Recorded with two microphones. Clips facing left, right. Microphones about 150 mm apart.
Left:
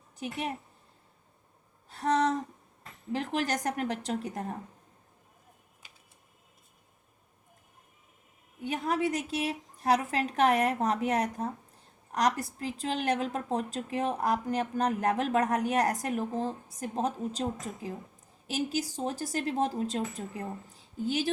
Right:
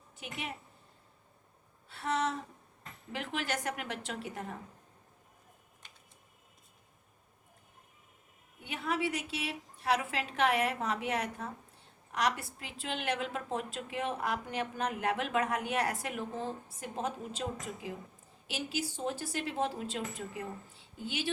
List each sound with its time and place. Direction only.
0.2 s a woman's voice: 40° left (ahead or behind)
1.9 s a sound: 40° left (ahead or behind)
3.1 s a woman's voice: 40° left (ahead or behind)
8.6 s a woman's voice: 40° left (ahead or behind)
18.4 s a woman's voice: 40° left (ahead or behind)